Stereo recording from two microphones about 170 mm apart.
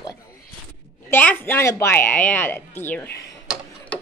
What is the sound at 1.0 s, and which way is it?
A woman's voice, 10° left (ahead or behind).